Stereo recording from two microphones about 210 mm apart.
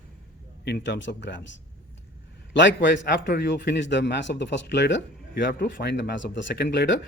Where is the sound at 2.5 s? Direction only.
60° left (ahead or behind).